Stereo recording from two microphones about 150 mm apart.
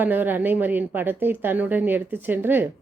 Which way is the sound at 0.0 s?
10° right (ahead or behind).